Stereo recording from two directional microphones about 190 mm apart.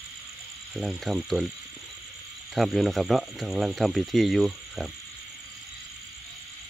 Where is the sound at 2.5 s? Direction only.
Centre (ahead or behind).